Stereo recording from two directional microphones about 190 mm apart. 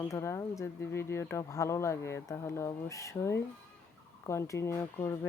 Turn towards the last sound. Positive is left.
turn(degrees=15)  # may be behind; listen again after turning